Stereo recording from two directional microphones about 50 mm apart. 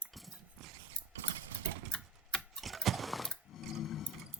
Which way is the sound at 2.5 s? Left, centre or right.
Centre.